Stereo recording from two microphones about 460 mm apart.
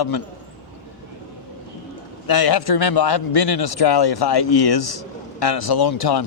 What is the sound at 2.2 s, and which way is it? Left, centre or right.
Speech, left.